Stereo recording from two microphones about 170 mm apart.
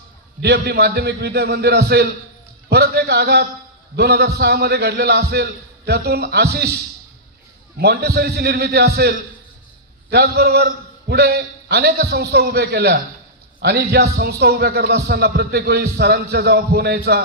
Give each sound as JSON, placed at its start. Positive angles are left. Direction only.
{"t": 0.4, "sound": "a man's voice", "side_deg": -70}
{"t": 7.8, "sound": "a man's voice", "side_deg": -70}